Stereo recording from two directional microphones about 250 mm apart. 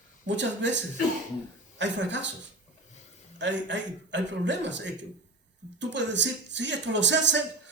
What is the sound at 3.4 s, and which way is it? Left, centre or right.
Speech, right.